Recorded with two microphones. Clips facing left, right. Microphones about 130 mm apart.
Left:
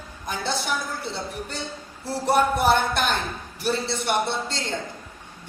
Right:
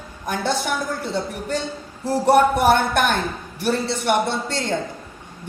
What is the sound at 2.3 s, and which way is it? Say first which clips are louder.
Speech: right 4 dB; 65° right (ahead or behind).